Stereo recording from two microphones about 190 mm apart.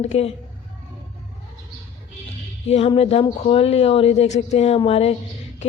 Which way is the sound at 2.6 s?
35° left (ahead or behind).